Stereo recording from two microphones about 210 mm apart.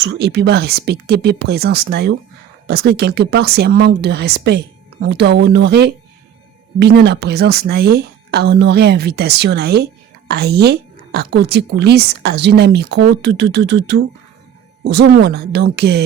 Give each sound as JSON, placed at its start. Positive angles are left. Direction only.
{"t": 0.0, "sound": "a woman's voice", "side_deg": -55}